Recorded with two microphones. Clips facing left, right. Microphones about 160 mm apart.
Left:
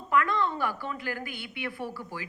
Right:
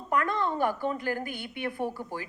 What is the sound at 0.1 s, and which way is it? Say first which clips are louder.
A woman's voice: left 1 dB; 40° right (ahead or behind).